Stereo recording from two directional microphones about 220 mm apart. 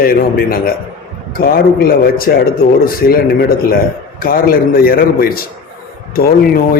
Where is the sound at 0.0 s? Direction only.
40° left (ahead or behind).